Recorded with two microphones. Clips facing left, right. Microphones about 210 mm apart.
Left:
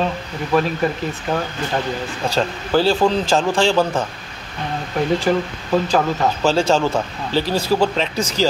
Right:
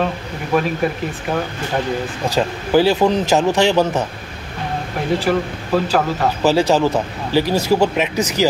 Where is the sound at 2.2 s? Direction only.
15° right (ahead or behind).